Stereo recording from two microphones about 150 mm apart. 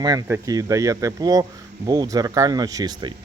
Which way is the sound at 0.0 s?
25° right (ahead or behind).